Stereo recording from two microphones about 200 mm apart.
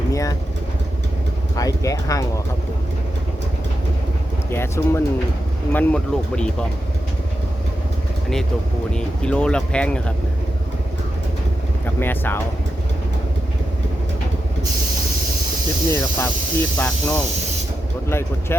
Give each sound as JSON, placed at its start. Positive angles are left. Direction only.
{"t": 0.1, "sound": "vehicle", "side_deg": 15}
{"t": 1.5, "sound": "clip-clop", "side_deg": 15}
{"t": 4.5, "sound": "speech", "side_deg": 10}
{"t": 8.9, "sound": "speech", "side_deg": 5}
{"t": 11.9, "sound": "speech", "side_deg": 10}
{"t": 15.9, "sound": "speech", "side_deg": 10}